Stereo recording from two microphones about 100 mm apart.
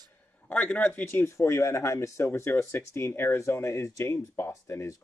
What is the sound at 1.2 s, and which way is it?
Speech, 30° left (ahead or behind).